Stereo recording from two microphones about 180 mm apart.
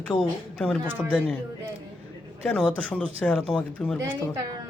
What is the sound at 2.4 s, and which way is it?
A man's voice, 5° left (ahead or behind).